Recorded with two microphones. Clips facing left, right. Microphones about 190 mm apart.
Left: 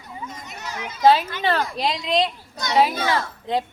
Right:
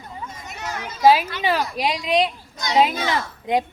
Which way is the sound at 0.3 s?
55° right (ahead or behind).